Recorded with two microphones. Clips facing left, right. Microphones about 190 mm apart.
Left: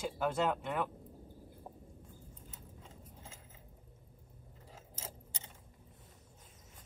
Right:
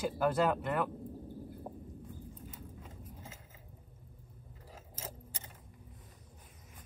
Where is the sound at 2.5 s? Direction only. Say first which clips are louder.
Right 5 dB; 10° right (ahead or behind).